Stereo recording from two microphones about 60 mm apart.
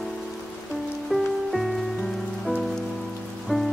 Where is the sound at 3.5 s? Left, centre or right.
Centre.